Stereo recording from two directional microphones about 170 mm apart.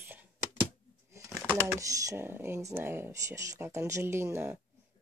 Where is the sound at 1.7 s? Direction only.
20° right (ahead or behind).